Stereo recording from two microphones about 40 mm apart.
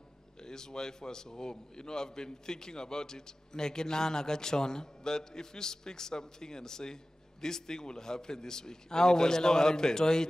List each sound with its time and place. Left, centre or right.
0.4 s a man's voice: centre